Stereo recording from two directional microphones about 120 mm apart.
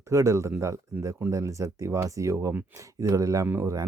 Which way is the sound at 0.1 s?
25° right (ahead or behind).